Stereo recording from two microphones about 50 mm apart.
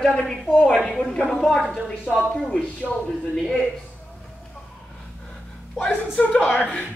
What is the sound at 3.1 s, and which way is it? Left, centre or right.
Speech, centre.